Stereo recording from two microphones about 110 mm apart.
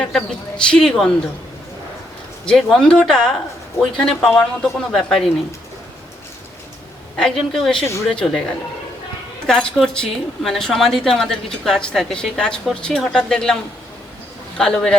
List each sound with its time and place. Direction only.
0.0 s speech: 5° left (ahead or behind)
2.5 s a woman's voice: 5° left (ahead or behind)
7.2 s a woman's voice: 5° left (ahead or behind)
9.5 s a woman's voice: 5° left (ahead or behind)
14.6 s speech: 5° left (ahead or behind)